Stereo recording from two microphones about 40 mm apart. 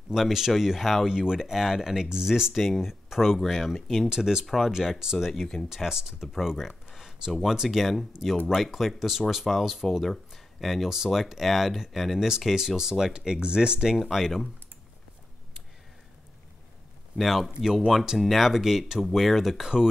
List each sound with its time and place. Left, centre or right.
0.1 s speech: centre
1.0 s speech: centre
2.5 s speech: centre
4.1 s speech: centre
4.5 s speech: centre
4.9 s speech: centre
5.3 s speech: centre
5.7 s speech: centre
6.9 s a sound: centre
7.4 s speech: centre
13.7 s speech: centre
17.2 s speech: centre
19.6 s speech: centre